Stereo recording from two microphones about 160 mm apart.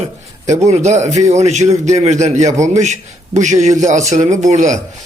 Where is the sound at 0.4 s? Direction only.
45° right (ahead or behind).